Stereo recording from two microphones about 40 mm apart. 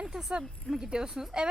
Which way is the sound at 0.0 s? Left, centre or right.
Centre.